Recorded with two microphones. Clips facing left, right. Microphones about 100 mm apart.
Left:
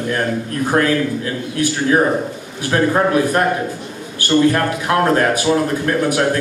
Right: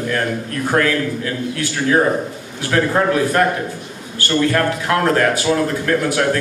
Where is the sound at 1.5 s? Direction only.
20° left (ahead or behind).